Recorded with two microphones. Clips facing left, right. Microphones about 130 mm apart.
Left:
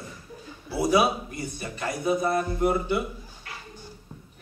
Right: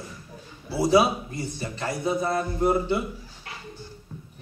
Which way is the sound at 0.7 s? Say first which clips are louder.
Right 2 dB; 30° right (ahead or behind).